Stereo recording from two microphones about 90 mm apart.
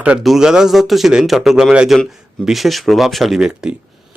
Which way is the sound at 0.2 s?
5° right (ahead or behind).